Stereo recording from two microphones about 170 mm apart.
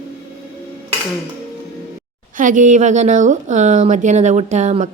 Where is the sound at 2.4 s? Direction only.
50° right (ahead or behind).